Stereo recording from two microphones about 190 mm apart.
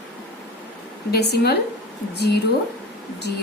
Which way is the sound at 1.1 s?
60° left (ahead or behind).